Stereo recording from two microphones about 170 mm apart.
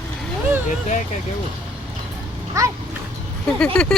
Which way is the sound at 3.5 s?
5° left (ahead or behind).